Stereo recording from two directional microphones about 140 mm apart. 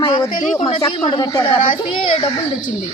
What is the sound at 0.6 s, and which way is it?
Speech, 45° left (ahead or behind).